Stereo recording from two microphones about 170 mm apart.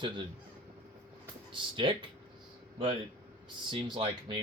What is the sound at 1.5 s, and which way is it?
Speech, 30° right (ahead or behind).